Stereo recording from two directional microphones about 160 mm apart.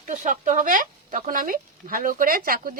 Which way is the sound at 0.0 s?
55° right (ahead or behind).